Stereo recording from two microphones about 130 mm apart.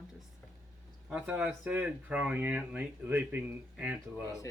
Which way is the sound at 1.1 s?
10° right (ahead or behind).